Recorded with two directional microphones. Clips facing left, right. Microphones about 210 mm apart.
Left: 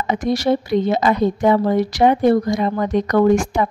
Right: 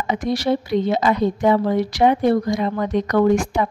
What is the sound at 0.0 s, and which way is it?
A woman's voice, 45° left (ahead or behind).